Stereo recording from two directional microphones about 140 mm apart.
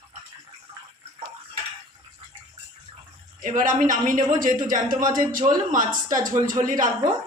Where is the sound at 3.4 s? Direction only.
70° right (ahead or behind).